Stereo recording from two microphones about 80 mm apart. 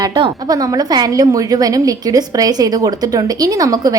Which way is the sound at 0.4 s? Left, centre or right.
Right.